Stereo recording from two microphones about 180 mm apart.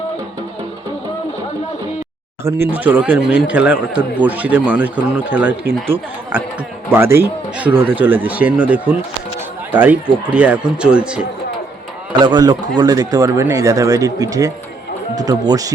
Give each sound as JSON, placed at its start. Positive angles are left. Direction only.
{"t": 2.4, "sound": "speech", "side_deg": -15}
{"t": 6.9, "sound": "speech", "side_deg": -10}
{"t": 12.2, "sound": "speech", "side_deg": -25}